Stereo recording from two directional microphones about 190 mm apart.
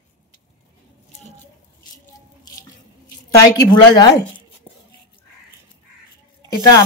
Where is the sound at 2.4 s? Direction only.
20° left (ahead or behind).